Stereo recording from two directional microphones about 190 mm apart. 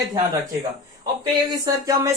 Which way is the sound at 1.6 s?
15° right (ahead or behind).